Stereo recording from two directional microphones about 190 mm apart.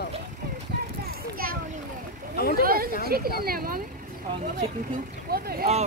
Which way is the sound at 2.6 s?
50° right (ahead or behind).